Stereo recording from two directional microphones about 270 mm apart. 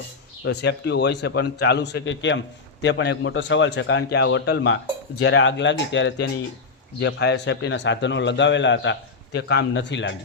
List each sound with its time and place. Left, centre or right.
0.4 s a man's voice: left